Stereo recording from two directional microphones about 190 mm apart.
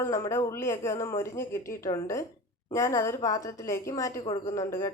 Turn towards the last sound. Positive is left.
turn(degrees=15)  # may be behind; listen again after turning